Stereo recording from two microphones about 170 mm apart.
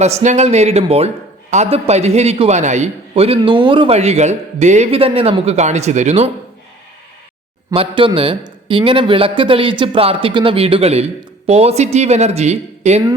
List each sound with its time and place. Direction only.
0.0 s a man's voice: 40° right (ahead or behind)
7.7 s a man's voice: 30° right (ahead or behind)